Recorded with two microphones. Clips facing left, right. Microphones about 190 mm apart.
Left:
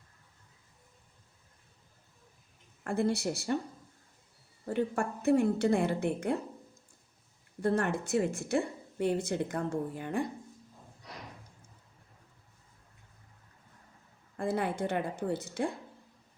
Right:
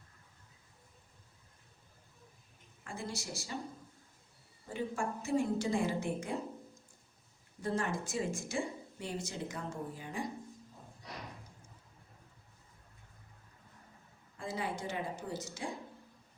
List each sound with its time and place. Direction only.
2.8 s speech: 60° left (ahead or behind)
4.6 s speech: 60° left (ahead or behind)
7.6 s speech: 60° left (ahead or behind)
14.3 s speech: 55° left (ahead or behind)